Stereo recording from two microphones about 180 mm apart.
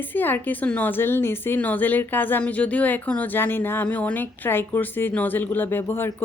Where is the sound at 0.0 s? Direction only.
10° left (ahead or behind).